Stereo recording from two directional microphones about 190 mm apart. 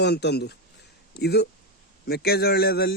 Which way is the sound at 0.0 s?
60° left (ahead or behind).